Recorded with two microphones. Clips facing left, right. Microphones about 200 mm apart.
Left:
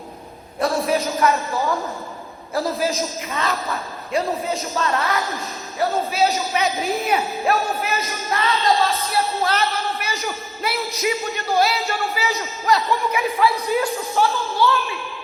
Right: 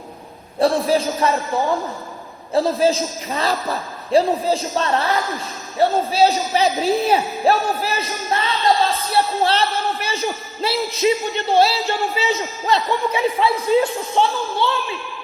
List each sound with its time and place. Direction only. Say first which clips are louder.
0.6 s a man's voice: right 3 dB; 30° right (ahead or behind)
2.5 s a man's voice: right 6 dB; 30° right (ahead or behind)